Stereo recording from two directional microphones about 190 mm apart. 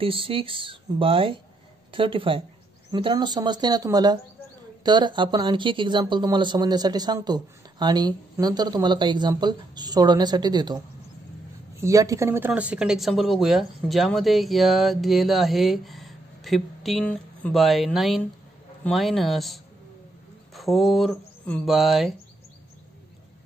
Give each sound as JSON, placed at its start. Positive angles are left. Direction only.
{"t": 0.0, "sound": "speech", "side_deg": -30}
{"t": 11.8, "sound": "speech", "side_deg": -15}